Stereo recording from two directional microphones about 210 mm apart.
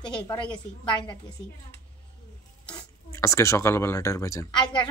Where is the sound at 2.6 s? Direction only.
15° left (ahead or behind).